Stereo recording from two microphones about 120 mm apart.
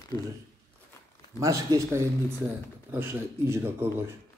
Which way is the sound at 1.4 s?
25° right (ahead or behind).